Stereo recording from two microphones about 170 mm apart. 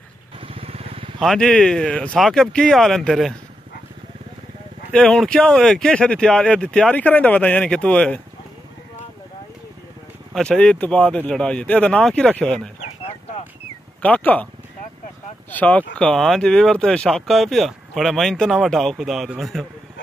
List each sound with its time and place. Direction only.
0.4 s vehicle: 35° right (ahead or behind)
1.2 s speech: 5° left (ahead or behind)
4.9 s speech: 5° left (ahead or behind)
10.3 s speech: 5° left (ahead or behind)
14.0 s speech: 10° left (ahead or behind)
15.5 s speech: 10° left (ahead or behind)